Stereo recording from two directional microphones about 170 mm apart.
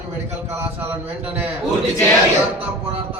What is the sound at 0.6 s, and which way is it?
Speech, 10° right (ahead or behind).